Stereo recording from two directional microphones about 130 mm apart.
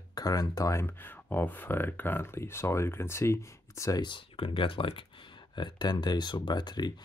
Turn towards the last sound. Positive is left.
turn(degrees=35)  # may be behind; listen again after turning